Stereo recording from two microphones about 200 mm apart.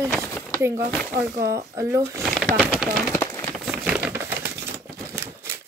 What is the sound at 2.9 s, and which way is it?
Run, 5° left (ahead or behind).